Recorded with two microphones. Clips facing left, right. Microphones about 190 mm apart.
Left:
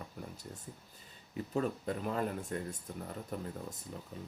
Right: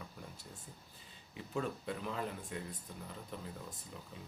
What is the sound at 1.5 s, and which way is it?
Speech, 40° left (ahead or behind).